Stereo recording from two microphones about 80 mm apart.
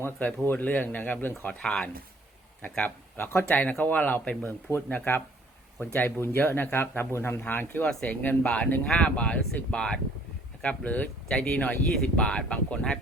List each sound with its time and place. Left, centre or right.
0.0 s speech: left
7.9 s speech: centre